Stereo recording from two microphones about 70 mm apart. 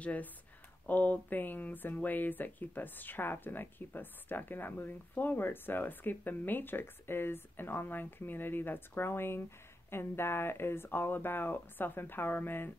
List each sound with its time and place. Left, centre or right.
0.0 s speech: left